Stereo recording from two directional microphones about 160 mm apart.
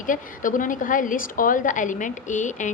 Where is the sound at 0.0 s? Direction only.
55° left (ahead or behind).